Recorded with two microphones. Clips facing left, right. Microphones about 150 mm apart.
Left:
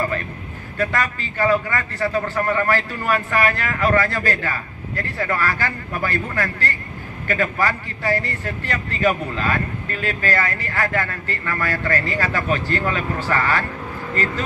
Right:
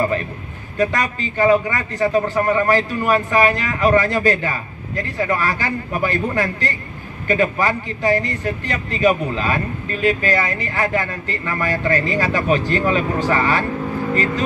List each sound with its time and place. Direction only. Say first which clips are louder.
0.7 s a man's voice: right 3 dB; 20° right (ahead or behind)